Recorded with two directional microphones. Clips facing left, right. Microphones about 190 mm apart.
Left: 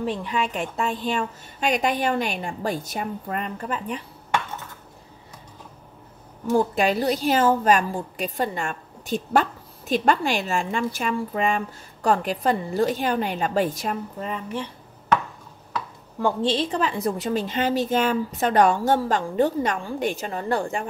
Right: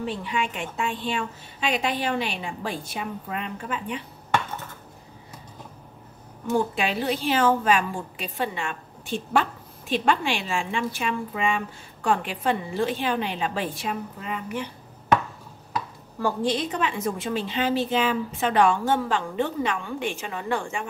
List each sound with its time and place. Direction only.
0.0 s a woman's voice: 40° left (ahead or behind)
6.7 s a woman's voice: 40° left (ahead or behind)
16.2 s a woman's voice: 20° left (ahead or behind); by 20.8 s 40° left (ahead or behind)